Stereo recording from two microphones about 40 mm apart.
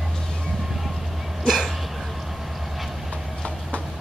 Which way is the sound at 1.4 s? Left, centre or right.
Centre.